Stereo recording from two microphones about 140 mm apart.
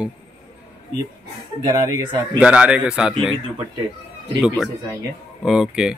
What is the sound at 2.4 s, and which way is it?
Speech, 5° right (ahead or behind).